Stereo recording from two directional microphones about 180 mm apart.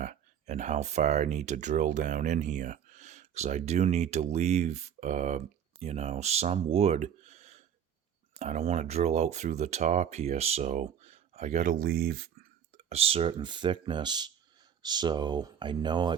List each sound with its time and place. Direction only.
0.0 s speech: 45° right (ahead or behind); by 12.5 s 65° right (ahead or behind)
12.7 s speech: 35° right (ahead or behind)